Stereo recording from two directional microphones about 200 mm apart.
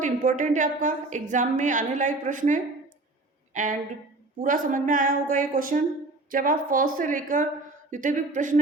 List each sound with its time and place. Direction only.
0.0 s a woman's voice: 40° right (ahead or behind)